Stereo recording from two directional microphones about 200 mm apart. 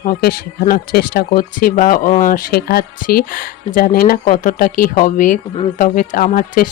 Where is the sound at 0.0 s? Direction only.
50° left (ahead or behind).